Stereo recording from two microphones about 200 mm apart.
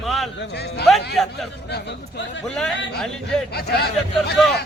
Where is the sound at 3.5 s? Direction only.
55° left (ahead or behind).